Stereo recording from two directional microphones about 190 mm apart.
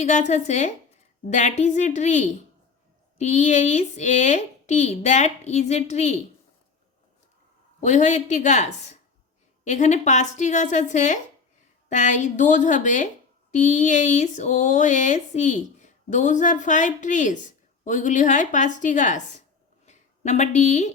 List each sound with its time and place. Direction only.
0.0 s speech: 40° left (ahead or behind)
7.8 s speech: 40° left (ahead or behind)
19.8 s a sound: 35° left (ahead or behind)